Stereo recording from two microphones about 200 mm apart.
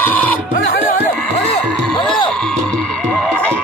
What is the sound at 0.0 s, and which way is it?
Music, 10° left (ahead or behind).